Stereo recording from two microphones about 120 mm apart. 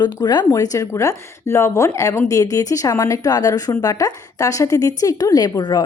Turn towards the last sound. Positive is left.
turn(degrees=35)  # may be behind; listen again after turning